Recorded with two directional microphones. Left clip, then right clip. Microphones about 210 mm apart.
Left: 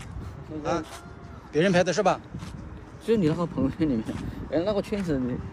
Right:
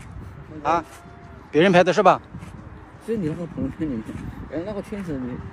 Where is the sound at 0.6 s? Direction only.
25° right (ahead or behind).